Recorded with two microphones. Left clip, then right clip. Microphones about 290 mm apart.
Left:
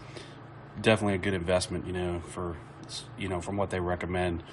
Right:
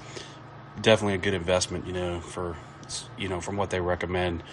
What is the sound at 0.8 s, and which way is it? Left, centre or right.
Speech, centre.